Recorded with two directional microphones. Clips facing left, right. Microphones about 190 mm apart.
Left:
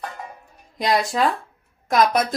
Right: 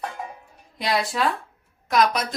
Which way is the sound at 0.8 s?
45° left (ahead or behind).